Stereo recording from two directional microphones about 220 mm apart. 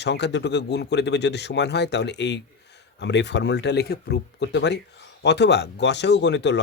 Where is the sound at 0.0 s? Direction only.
50° left (ahead or behind).